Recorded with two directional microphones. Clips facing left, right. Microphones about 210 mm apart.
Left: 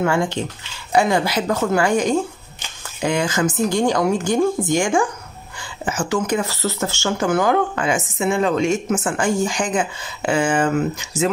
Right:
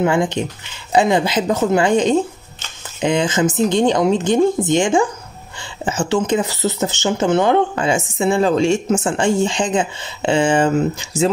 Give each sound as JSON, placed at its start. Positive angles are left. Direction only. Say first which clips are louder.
{"t": 0.0, "sound": "speech", "louder": "right 3 dB", "side_deg": -20}